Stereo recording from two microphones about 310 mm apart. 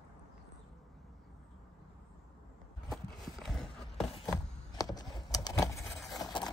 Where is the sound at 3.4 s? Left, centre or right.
Centre.